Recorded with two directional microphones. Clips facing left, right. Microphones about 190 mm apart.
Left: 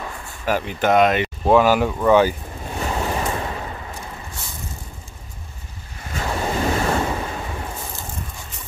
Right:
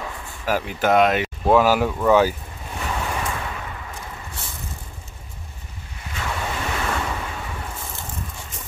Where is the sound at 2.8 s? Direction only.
35° left (ahead or behind).